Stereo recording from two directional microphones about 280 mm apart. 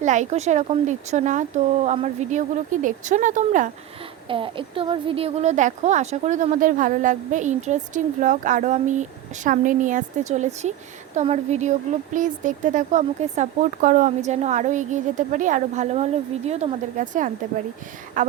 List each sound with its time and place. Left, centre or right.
0.0 s a woman's voice: right